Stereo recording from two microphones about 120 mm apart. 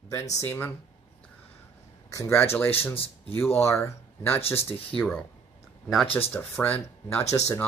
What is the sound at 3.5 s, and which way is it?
Speech, 25° left (ahead or behind).